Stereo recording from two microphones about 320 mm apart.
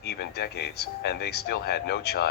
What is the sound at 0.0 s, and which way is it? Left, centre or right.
Speech, left.